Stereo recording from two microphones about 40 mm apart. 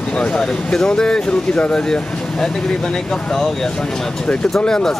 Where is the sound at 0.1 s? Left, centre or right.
Left.